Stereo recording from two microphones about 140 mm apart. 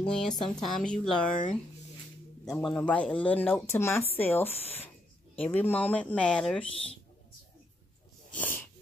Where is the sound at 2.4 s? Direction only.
5° left (ahead or behind).